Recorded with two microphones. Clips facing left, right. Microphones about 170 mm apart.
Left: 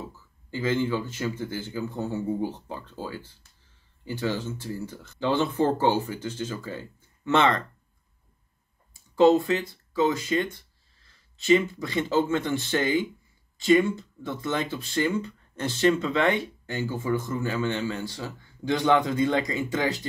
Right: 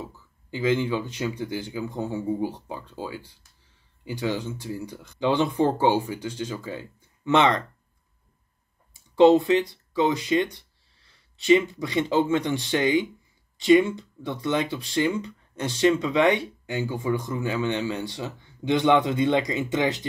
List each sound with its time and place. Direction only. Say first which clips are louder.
0.5 s speech: right 2 dB; 15° right (ahead or behind)
9.5 s speech: right 5 dB; 20° right (ahead or behind)